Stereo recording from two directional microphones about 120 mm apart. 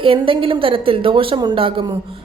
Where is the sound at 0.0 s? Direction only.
50° right (ahead or behind).